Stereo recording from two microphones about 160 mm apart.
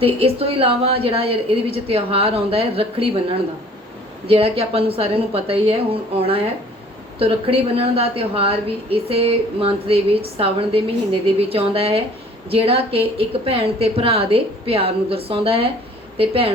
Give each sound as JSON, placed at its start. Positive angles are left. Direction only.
{"t": 0.0, "sound": "a woman's voice", "side_deg": -35}